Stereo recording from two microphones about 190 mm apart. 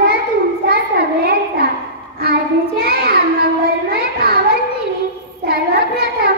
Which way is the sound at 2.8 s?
55° right (ahead or behind).